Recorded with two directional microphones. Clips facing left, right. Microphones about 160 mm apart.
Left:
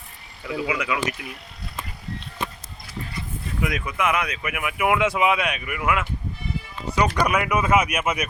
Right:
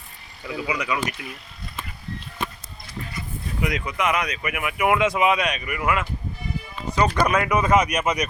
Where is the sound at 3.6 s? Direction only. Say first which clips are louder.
Even; centre (ahead or behind).